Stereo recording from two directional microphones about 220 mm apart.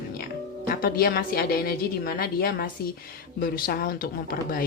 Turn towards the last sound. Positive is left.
turn(degrees=40)  # may be behind; listen again after turning